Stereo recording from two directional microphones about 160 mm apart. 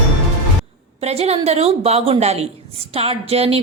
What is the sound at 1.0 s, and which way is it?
A woman's voice, 40° right (ahead or behind).